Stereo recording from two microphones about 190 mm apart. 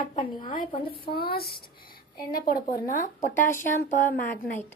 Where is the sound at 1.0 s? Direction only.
55° left (ahead or behind).